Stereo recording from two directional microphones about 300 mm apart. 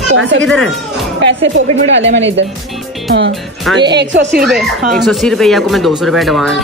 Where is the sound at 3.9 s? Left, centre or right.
Right.